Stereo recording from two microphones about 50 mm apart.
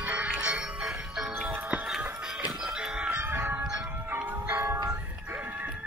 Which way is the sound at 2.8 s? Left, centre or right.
Centre.